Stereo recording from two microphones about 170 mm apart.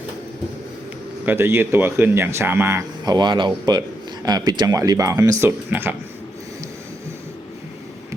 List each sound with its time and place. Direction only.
1.2 s speech: 10° right (ahead or behind)
3.0 s speech: 25° right (ahead or behind)